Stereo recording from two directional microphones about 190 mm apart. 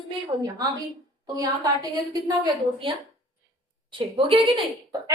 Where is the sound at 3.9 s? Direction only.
25° right (ahead or behind).